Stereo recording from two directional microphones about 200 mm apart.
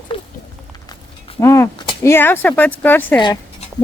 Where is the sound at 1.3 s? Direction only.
15° left (ahead or behind).